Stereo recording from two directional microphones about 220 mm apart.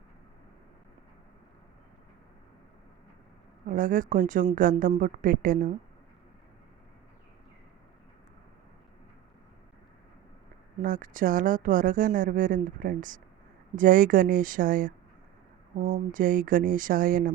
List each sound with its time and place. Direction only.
3.7 s a woman's voice: 40° right (ahead or behind)
10.8 s a woman's voice: 40° right (ahead or behind)